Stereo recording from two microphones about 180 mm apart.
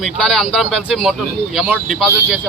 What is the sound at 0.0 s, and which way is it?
Speech, centre (ahead or behind).